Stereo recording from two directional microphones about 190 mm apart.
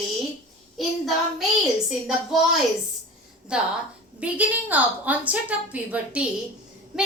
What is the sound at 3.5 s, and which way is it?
A woman's voice, 5° right (ahead or behind).